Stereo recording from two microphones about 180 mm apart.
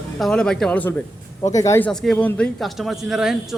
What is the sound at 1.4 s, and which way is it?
Speech, 20° left (ahead or behind).